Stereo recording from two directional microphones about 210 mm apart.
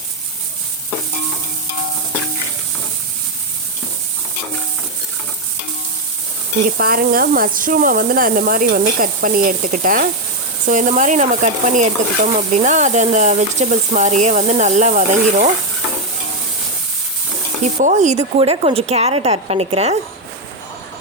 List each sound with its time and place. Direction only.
6.7 s speech: 45° right (ahead or behind)
10.7 s stir: 35° right (ahead or behind)
17.8 s a woman's voice: 35° right (ahead or behind)